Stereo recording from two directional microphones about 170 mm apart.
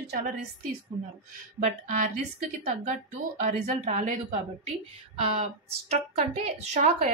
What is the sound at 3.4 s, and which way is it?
A woman's voice, 45° right (ahead or behind).